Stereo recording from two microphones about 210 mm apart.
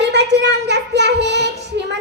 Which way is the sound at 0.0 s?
55° right (ahead or behind).